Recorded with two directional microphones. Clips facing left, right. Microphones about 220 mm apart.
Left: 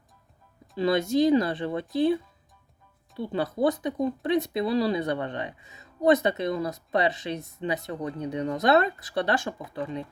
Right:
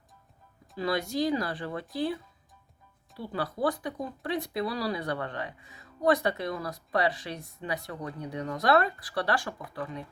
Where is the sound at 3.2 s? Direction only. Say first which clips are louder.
Left 5 dB; 25° left (ahead or behind).